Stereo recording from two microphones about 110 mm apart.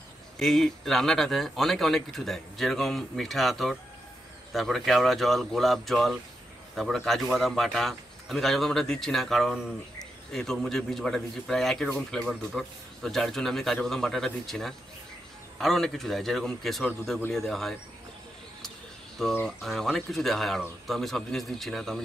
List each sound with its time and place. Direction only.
0.4 s speech: 5° left (ahead or behind)
19.4 s speech: 5° left (ahead or behind)